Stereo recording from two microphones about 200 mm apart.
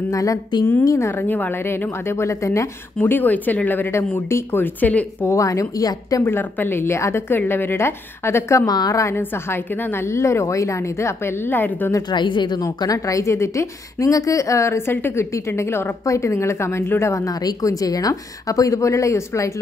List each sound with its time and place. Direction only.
0.1 s a woman's voice: 15° left (ahead or behind)
12.1 s a woman's voice: 25° left (ahead or behind)